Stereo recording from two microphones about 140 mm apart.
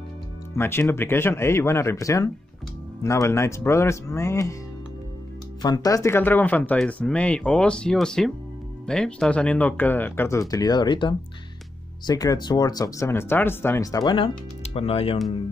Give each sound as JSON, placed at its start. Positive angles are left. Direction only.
{"t": 0.6, "sound": "speech", "side_deg": 15}
{"t": 5.6, "sound": "speech", "side_deg": 30}
{"t": 14.1, "sound": "speech", "side_deg": 40}